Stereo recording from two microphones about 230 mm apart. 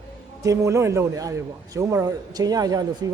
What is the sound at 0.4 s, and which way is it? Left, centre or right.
A man's voice, centre.